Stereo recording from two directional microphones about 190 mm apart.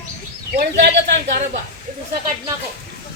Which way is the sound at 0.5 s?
55° right (ahead or behind).